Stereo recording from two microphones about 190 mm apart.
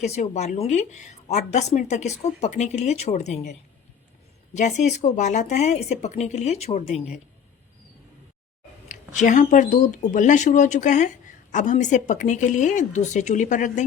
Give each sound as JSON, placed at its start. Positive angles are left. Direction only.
{"t": 0.0, "sound": "a woman's voice", "side_deg": 35}
{"t": 4.5, "sound": "a woman's voice", "side_deg": 40}
{"t": 8.9, "sound": "a woman's voice", "side_deg": 40}